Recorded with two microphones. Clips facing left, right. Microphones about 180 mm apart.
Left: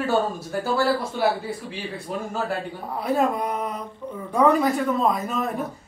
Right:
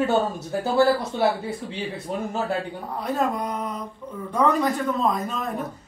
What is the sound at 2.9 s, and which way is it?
Speech, 5° left (ahead or behind).